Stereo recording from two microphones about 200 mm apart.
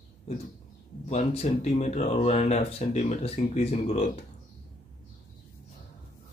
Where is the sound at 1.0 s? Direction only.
35° left (ahead or behind).